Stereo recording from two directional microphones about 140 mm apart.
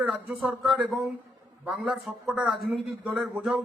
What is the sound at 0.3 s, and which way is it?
A man's voice, centre (ahead or behind).